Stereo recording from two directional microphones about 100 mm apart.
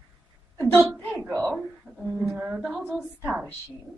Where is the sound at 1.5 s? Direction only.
5° right (ahead or behind).